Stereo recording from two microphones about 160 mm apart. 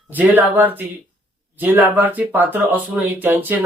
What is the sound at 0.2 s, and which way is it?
Speech, 10° right (ahead or behind).